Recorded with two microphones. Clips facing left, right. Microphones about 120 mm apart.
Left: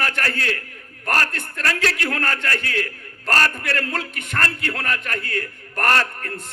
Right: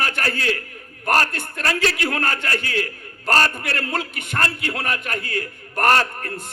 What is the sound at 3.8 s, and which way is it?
A man's voice, 15° right (ahead or behind).